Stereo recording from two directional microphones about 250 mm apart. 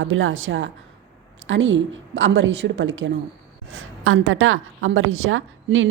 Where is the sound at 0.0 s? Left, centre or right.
Right.